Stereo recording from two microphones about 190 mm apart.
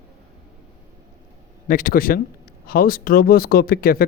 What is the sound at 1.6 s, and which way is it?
Speech, 45° left (ahead or behind).